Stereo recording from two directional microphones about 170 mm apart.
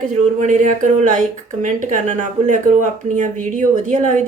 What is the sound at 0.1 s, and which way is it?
A woman's voice, 45° right (ahead or behind).